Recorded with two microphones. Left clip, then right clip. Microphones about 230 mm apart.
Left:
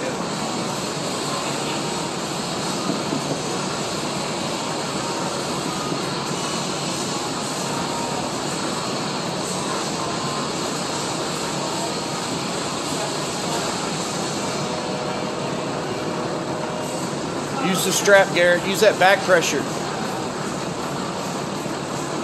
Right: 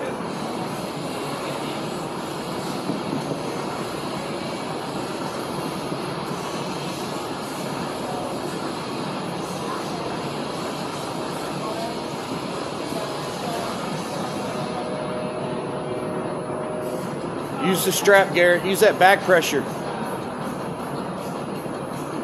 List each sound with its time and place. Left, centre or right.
17.6 s speech: right